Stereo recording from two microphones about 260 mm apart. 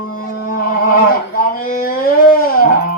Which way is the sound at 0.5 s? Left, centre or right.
Left.